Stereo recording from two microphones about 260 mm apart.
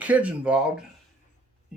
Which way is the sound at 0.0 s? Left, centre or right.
Centre.